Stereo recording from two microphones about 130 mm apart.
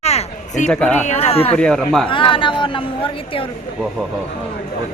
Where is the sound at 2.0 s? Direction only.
40° left (ahead or behind).